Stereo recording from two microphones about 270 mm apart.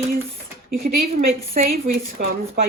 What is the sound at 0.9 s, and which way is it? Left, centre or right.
A woman's voice, right.